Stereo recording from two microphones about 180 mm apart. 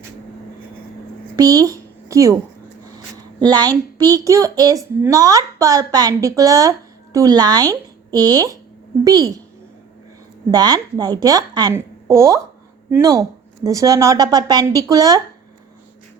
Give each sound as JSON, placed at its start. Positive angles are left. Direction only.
{"t": 1.4, "sound": "speech", "side_deg": -20}
{"t": 3.5, "sound": "a woman's voice", "side_deg": -20}
{"t": 10.5, "sound": "a woman's voice", "side_deg": -20}